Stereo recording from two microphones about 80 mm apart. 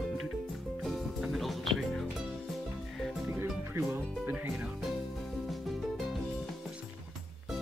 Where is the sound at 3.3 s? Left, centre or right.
Right.